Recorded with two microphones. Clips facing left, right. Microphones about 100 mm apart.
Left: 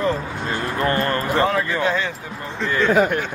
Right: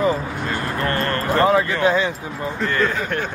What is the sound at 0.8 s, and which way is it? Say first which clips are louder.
Speech: left 3 dB; 20° left (ahead or behind).